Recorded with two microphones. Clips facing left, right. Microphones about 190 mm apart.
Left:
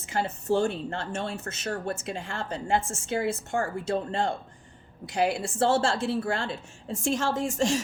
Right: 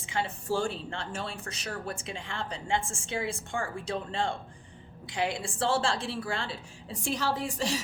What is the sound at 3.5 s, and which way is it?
Speech, 40° left (ahead or behind).